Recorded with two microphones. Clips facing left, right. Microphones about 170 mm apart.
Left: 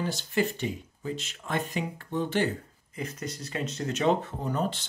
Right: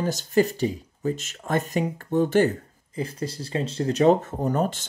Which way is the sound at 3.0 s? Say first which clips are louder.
Right 6 dB; 30° right (ahead or behind).